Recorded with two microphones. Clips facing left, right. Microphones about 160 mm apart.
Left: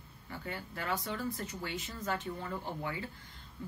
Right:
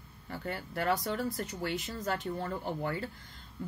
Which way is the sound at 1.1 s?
70° right (ahead or behind).